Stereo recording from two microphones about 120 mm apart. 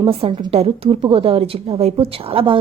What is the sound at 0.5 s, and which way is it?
Speech, 55° right (ahead or behind).